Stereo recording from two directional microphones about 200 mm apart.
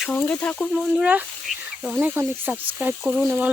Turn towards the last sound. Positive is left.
turn(degrees=-10)  # may be behind; listen again after turning